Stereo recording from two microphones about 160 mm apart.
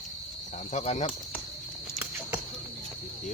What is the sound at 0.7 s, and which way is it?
Speech, 45° left (ahead or behind).